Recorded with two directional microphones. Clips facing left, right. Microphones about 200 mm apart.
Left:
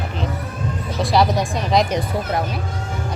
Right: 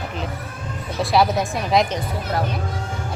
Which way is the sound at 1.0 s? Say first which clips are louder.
Left 1 dB; centre (ahead or behind).